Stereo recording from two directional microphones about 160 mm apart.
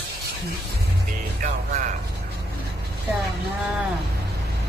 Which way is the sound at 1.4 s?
55° right (ahead or behind).